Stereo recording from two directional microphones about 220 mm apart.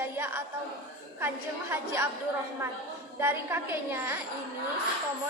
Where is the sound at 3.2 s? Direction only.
10° right (ahead or behind).